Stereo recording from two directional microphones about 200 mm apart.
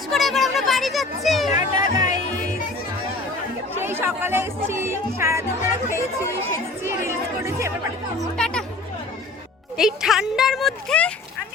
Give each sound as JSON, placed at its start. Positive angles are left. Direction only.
{"t": 0.1, "sound": "children playing", "side_deg": 0}
{"t": 1.5, "sound": "music", "side_deg": -20}
{"t": 3.8, "sound": "speech", "side_deg": -10}
{"t": 8.4, "sound": "speech", "side_deg": 5}
{"t": 9.7, "sound": "speech", "side_deg": 0}